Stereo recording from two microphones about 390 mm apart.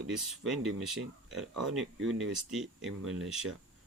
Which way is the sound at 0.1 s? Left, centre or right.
Centre.